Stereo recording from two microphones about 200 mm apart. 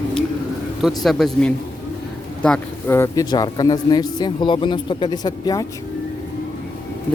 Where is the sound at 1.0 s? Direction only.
Centre (ahead or behind); by 5.6 s 20° left (ahead or behind).